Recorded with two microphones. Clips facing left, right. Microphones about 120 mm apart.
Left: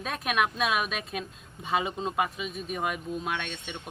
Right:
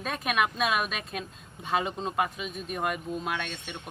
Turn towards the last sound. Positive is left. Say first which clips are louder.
# even
turn(degrees=0)  # may be behind; listen again after turning